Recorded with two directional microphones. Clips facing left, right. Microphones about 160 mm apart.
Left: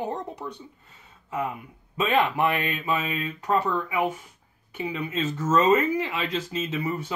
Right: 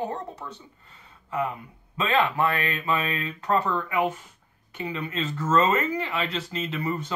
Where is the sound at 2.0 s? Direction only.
15° left (ahead or behind).